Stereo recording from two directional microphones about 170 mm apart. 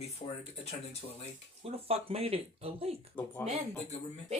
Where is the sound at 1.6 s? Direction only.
35° right (ahead or behind).